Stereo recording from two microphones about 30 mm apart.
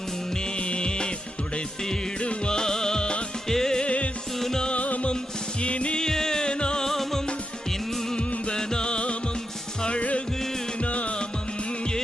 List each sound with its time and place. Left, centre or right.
0.6 s music: left
2.5 s music: left
3.8 s music: left
4.4 s music: centre
4.7 s music: left
6.0 s music: centre
6.5 s music: left
6.8 s music: centre
8.5 s music: left
10.8 s music: left